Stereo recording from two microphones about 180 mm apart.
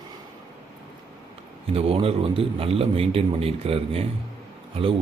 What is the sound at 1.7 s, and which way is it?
Speech, 30° right (ahead or behind).